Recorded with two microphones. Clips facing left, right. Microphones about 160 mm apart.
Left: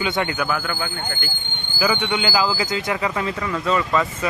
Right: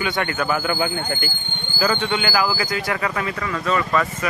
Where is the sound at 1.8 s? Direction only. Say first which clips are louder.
Even; 10° left (ahead or behind).